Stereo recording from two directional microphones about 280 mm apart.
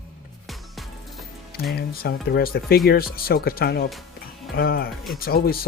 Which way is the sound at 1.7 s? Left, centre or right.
Left.